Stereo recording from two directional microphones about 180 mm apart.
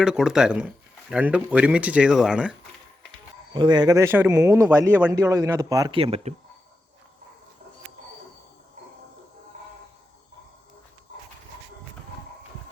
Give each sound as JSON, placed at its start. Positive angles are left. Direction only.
{"t": 0.0, "sound": "speech", "side_deg": -5}
{"t": 3.5, "sound": "a man's voice", "side_deg": -25}
{"t": 6.0, "sound": "speech", "side_deg": -35}